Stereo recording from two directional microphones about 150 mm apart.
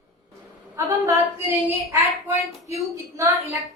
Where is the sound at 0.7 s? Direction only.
15° right (ahead or behind).